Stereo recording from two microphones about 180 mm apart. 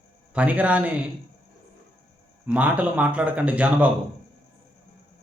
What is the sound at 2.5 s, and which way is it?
Speech, 10° right (ahead or behind).